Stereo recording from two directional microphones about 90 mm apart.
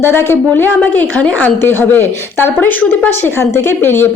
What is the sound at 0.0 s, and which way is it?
A woman's voice, 25° left (ahead or behind).